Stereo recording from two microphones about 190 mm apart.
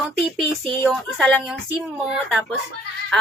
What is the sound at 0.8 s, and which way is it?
Speech, centre (ahead or behind).